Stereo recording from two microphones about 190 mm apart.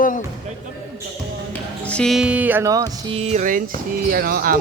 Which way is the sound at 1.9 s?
5° left (ahead or behind).